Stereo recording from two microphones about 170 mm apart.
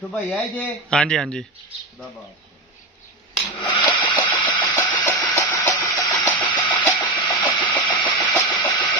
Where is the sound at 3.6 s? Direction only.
30° left (ahead or behind).